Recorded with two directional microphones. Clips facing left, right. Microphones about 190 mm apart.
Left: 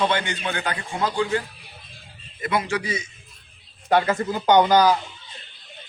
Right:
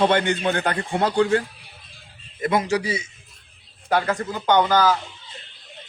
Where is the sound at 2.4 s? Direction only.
45° right (ahead or behind).